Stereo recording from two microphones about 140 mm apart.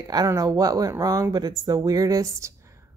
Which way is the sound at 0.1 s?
25° right (ahead or behind).